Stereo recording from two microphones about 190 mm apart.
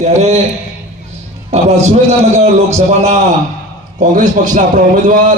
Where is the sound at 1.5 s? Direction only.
35° right (ahead or behind).